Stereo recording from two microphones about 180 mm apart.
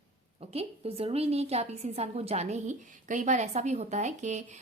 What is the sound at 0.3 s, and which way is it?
A woman's voice, 35° right (ahead or behind).